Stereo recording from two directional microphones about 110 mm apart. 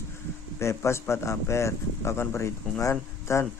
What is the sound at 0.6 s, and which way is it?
Speech, 25° left (ahead or behind).